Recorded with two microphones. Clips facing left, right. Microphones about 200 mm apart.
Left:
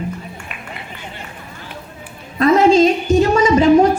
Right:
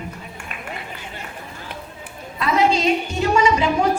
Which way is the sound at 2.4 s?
45° left (ahead or behind).